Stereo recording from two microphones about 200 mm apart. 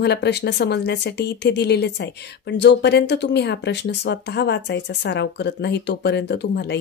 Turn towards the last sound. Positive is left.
turn(degrees=55)  # may be behind; listen again after turning